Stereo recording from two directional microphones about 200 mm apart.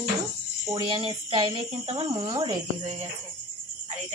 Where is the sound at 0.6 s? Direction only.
20° right (ahead or behind).